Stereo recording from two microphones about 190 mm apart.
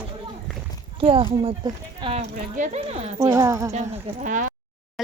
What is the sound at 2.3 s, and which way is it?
Speech, 45° right (ahead or behind).